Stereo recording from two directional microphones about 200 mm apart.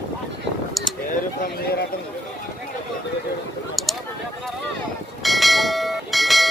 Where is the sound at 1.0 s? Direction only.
50° left (ahead or behind).